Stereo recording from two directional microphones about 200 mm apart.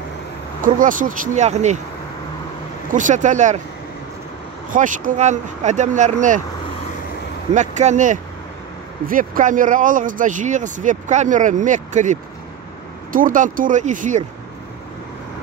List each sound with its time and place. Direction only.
0.6 s speech: 40° right (ahead or behind)
2.9 s speech: 40° right (ahead or behind)
4.6 s speech: 40° right (ahead or behind)
7.5 s speech: 35° right (ahead or behind)